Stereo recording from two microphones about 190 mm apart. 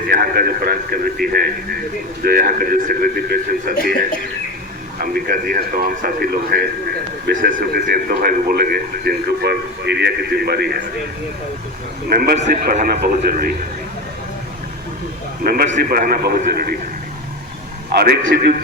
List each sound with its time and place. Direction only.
0.1 s a man's voice: 50° right (ahead or behind)
4.9 s a man's voice: 50° right (ahead or behind)
12.0 s a man's voice: 55° right (ahead or behind)
12.4 s a man's voice: 40° right (ahead or behind)
15.4 s a man's voice: 50° right (ahead or behind)
17.9 s a man's voice: 60° right (ahead or behind)